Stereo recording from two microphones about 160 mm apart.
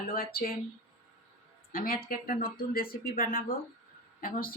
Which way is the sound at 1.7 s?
65° left (ahead or behind).